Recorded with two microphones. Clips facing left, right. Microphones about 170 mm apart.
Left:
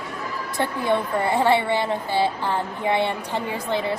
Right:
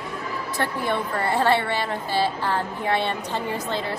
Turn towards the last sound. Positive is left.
turn(degrees=15)  # may be behind; listen again after turning